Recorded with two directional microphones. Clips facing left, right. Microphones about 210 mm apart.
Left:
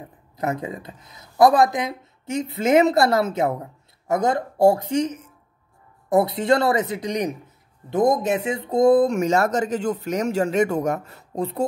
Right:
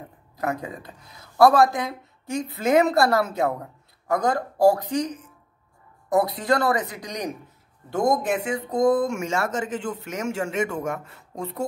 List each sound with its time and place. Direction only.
0.4 s speech: 20° left (ahead or behind)